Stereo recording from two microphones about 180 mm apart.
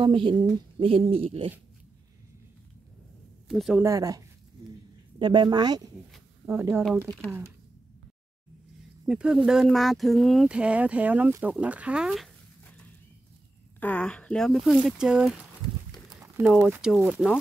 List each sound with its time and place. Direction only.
0.0 s a woman's voice: 25° right (ahead or behind)
3.4 s speech: centre (ahead or behind)
3.8 s speech: 20° right (ahead or behind)
6.1 s a sound: 10° right (ahead or behind)
7.2 s speech: 10° right (ahead or behind)
9.0 s speech: 5° right (ahead or behind)
13.7 s speech: 10° left (ahead or behind)